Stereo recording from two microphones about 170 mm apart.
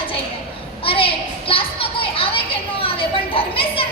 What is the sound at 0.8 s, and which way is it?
A woman's voice, 35° left (ahead or behind).